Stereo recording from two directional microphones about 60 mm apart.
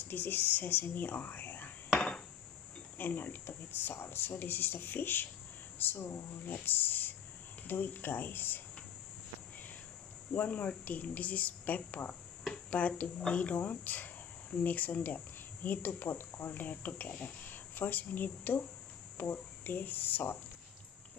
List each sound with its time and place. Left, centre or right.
0.1 s speech: left
2.0 s hammer: centre
3.0 s speech: left
10.3 s speech: left